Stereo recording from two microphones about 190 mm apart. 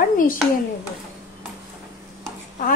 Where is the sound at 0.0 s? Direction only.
45° left (ahead or behind).